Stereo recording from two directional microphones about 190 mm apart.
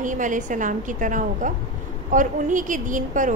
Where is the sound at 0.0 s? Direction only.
40° right (ahead or behind).